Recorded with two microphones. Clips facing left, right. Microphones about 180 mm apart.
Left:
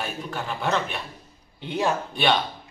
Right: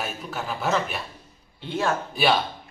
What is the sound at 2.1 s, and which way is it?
Speech, 5° right (ahead or behind).